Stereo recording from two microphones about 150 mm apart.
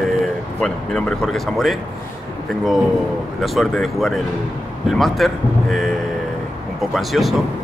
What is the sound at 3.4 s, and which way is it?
Speech, centre (ahead or behind).